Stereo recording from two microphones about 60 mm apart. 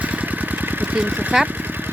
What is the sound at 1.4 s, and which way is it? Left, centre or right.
Vehicle, right.